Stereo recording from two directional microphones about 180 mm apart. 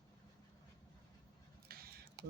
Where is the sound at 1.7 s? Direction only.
55° right (ahead or behind).